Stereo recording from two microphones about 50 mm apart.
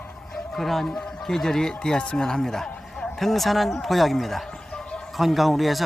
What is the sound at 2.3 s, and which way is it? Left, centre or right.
Speech, centre.